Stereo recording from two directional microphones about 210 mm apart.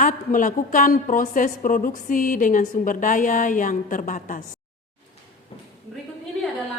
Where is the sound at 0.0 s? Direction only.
40° left (ahead or behind).